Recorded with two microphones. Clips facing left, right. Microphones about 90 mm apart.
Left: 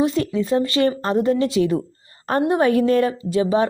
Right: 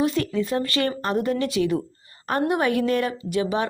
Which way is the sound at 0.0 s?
25° left (ahead or behind).